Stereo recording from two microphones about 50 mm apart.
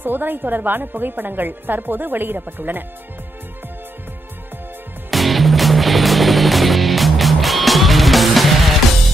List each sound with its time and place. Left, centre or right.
0.0 s speech: right
5.1 s music: centre